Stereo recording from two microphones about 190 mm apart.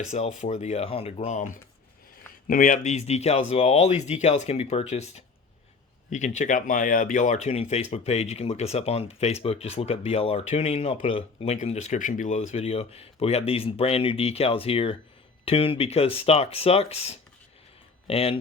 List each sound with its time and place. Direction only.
0.0 s speech: 40° left (ahead or behind)